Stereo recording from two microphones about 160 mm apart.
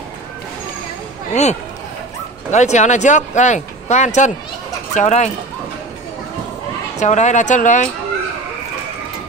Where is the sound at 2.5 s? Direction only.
45° left (ahead or behind).